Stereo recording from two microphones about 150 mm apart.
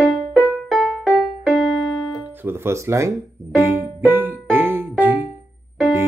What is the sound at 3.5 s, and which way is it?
Music, 15° right (ahead or behind).